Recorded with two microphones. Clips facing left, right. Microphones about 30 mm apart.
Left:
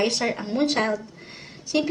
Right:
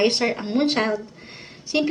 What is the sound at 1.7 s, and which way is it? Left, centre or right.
Speech, centre.